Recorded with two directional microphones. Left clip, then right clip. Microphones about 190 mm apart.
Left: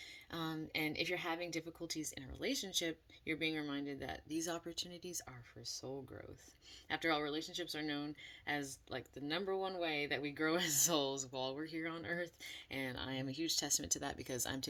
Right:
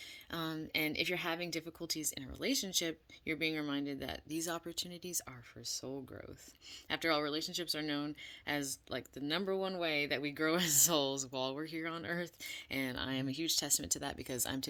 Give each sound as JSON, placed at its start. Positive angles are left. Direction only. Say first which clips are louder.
{"t": 0.3, "sound": "speech", "louder": "right 3 dB", "side_deg": -45}
{"t": 6.8, "sound": "speech", "louder": "right 3 dB", "side_deg": -45}